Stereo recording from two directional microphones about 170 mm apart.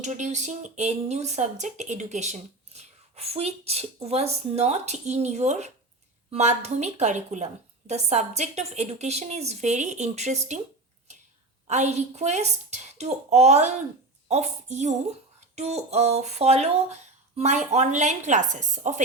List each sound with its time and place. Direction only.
0.0 s speech: 45° right (ahead or behind)
11.7 s speech: 40° right (ahead or behind)